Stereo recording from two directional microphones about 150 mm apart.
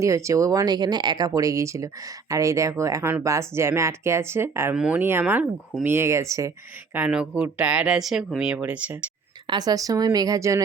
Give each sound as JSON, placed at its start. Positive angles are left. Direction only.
{"t": 0.0, "sound": "speech", "side_deg": -20}
{"t": 6.9, "sound": "speech", "side_deg": -5}
{"t": 9.5, "sound": "speech", "side_deg": -25}